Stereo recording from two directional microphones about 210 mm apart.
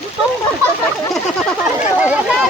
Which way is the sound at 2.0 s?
5° right (ahead or behind).